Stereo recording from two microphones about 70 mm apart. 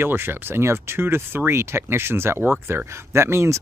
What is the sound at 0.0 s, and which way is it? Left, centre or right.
Speech, right.